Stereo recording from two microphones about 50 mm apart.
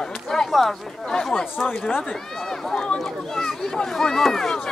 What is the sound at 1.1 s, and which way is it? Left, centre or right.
Speech, centre.